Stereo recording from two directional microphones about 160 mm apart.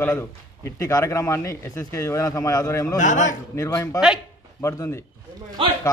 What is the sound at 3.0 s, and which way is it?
Speech, 50° left (ahead or behind).